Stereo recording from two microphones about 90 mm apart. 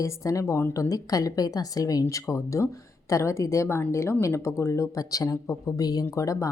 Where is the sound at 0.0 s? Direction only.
35° left (ahead or behind).